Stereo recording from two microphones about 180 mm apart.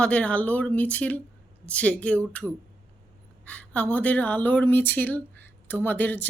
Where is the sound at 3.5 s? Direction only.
10° left (ahead or behind).